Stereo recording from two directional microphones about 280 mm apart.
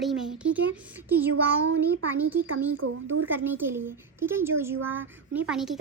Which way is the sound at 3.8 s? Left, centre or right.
Centre.